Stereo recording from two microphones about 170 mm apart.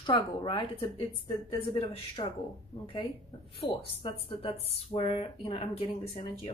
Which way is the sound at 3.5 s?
30° left (ahead or behind).